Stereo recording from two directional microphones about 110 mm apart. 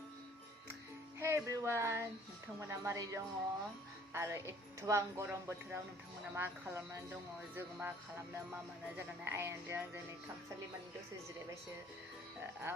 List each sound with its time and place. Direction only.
1.2 s music: 25° right (ahead or behind)
2.6 s speech: 25° right (ahead or behind)
9.2 s speech: 20° right (ahead or behind)
12.7 s speech: 20° right (ahead or behind)